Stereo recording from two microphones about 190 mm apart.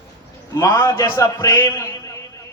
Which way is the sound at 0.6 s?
15° left (ahead or behind).